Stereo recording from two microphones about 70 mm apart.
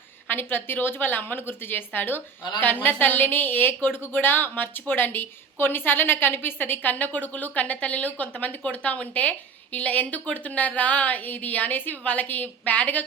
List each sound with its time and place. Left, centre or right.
0.3 s a woman's voice: left